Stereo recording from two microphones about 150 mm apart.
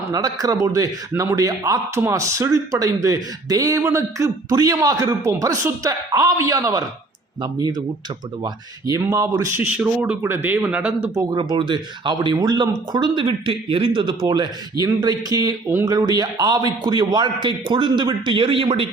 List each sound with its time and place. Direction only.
0.1 s speech: 25° right (ahead or behind)
8.4 s speech: 20° right (ahead or behind)
9.6 s speech: 10° right (ahead or behind)
11.1 s speech: 25° right (ahead or behind)